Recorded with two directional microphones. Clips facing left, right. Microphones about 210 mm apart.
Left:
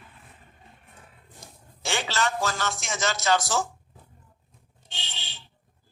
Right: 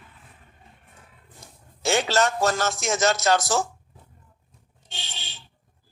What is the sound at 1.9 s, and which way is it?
A man's voice, 45° right (ahead or behind).